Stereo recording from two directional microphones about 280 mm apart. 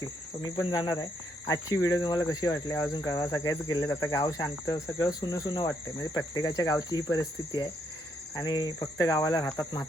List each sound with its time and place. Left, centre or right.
0.4 s speech: centre